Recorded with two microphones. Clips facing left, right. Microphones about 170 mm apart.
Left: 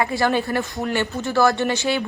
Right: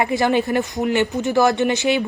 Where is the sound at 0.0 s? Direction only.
20° right (ahead or behind).